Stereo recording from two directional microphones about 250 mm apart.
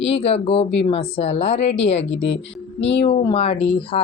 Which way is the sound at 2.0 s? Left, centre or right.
Left.